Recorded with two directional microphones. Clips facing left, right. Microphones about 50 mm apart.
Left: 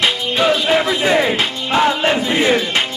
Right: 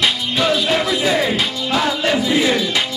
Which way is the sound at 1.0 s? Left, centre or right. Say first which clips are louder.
Left 2 dB; left.